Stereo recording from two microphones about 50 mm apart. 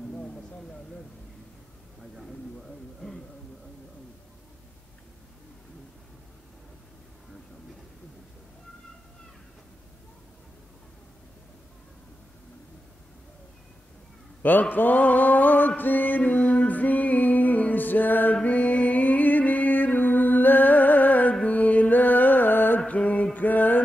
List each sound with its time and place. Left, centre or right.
0.1 s a sound: left
2.1 s a sound: centre
14.4 s mantra: left
18.3 s music: left
22.8 s mantra: left
23.3 s music: left